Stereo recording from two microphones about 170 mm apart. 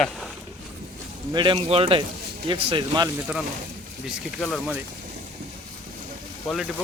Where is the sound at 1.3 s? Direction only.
30° right (ahead or behind).